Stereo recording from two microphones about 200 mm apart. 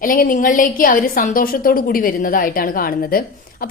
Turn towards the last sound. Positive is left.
turn(degrees=45)  # may be behind; listen again after turning